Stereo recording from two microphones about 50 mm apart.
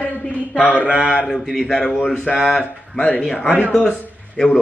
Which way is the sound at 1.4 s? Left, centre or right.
Centre.